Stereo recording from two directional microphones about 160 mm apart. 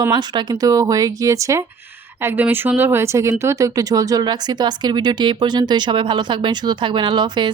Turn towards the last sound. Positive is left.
turn(degrees=-30)  # may be behind; listen again after turning